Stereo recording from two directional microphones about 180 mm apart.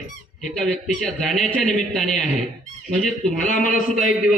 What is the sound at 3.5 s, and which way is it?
Speech, 45° left (ahead or behind).